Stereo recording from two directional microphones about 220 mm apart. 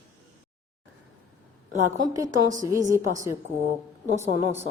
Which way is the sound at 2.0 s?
15° right (ahead or behind).